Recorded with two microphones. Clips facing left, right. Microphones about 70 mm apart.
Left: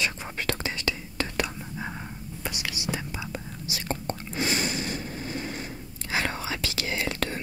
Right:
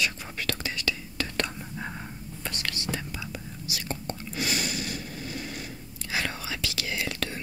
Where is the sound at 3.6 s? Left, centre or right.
Left.